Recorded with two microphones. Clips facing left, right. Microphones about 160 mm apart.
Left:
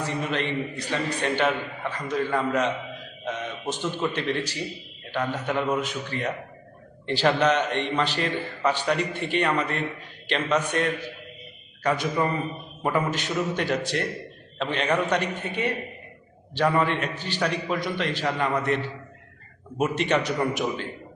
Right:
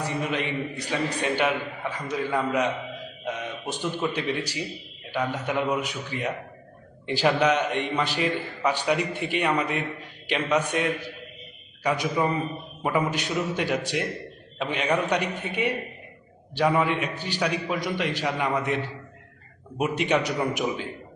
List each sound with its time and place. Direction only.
0.0 s a man's voice: 15° right (ahead or behind)
12.0 s a man's voice: centre (ahead or behind)
13.1 s a man's voice: 15° right (ahead or behind)
19.8 s a man's voice: 10° right (ahead or behind)